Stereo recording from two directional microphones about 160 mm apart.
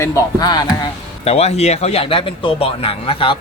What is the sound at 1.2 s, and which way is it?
A man's voice, 40° left (ahead or behind).